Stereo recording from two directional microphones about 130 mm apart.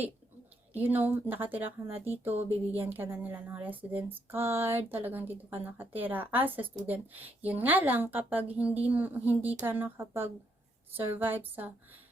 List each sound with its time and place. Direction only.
0.7 s a woman's voice: 15° right (ahead or behind)